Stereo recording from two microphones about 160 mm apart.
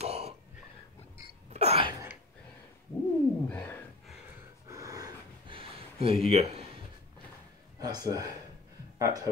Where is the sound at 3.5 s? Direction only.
10° left (ahead or behind).